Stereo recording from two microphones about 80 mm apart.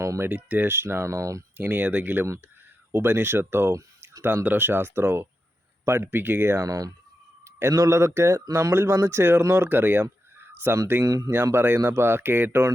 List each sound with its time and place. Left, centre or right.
0.0 s a sound: right
0.3 s speech: right
1.5 s speech: right
6.7 s speech: right
11.0 s speech: right
11.5 s speech: right